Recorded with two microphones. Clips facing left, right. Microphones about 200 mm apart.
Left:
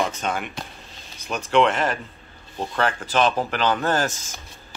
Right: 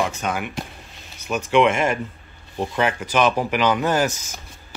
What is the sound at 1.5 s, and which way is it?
Speech, 10° right (ahead or behind).